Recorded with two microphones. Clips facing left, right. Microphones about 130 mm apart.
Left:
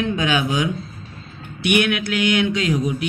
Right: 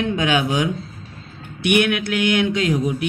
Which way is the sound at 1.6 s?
50° right (ahead or behind).